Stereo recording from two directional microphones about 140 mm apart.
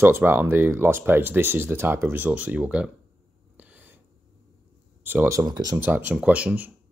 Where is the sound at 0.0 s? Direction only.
15° right (ahead or behind).